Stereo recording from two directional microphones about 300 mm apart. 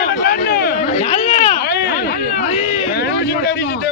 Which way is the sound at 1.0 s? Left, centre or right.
Left.